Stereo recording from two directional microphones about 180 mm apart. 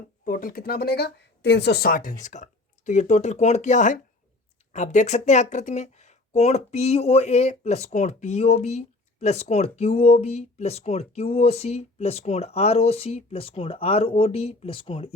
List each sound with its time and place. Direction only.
0.3 s speech: 50° left (ahead or behind); by 15.1 s 30° left (ahead or behind)